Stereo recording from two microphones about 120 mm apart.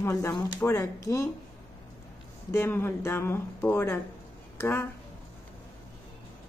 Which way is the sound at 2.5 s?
20° left (ahead or behind).